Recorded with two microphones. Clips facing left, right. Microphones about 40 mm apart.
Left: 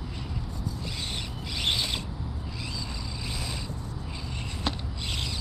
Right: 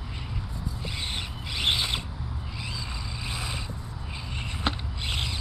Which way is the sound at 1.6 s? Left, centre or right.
Right.